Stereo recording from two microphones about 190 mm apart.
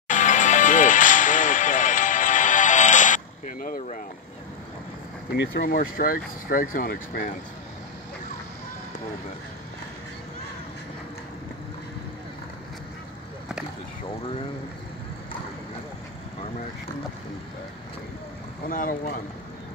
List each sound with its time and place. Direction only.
0.1 s music: 40° left (ahead or behind)
5.3 s speech: 60° left (ahead or behind)
18.7 s speech: 45° left (ahead or behind)